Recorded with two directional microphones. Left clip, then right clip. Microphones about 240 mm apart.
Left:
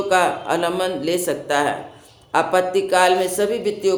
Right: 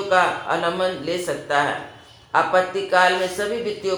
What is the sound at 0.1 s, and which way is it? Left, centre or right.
Speech, left.